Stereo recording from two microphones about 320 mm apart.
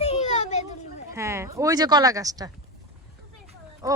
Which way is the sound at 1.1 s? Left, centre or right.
Centre.